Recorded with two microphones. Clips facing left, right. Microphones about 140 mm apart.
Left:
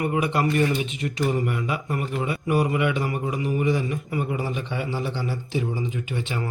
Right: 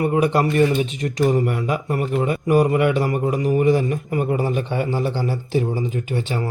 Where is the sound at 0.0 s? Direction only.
35° right (ahead or behind).